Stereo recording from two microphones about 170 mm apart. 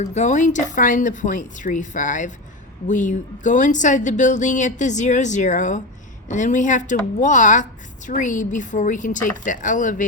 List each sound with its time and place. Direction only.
0.0 s a woman's voice: 40° left (ahead or behind)